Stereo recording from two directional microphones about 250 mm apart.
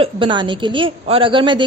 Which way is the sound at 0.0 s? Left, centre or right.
Centre.